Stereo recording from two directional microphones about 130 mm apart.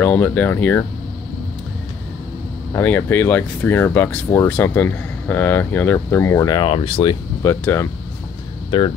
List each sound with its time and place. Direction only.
0.0 s speech: 10° left (ahead or behind)
2.7 s speech: 15° left (ahead or behind)
6.6 s speech: 45° left (ahead or behind)
7.4 s speech: 20° left (ahead or behind)
8.6 s speech: 40° left (ahead or behind)